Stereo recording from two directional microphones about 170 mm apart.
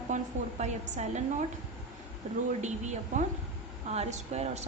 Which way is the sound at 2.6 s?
45° right (ahead or behind).